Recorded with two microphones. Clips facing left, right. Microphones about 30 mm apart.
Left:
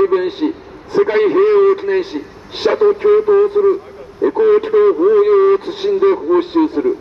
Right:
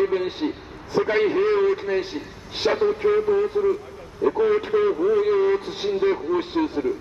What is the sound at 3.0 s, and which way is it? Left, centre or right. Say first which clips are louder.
Speech: left 9 dB; centre.